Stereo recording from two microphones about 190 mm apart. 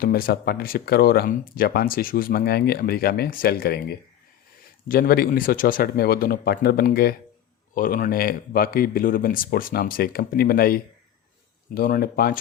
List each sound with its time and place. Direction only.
0.0 s speech: 50° left (ahead or behind)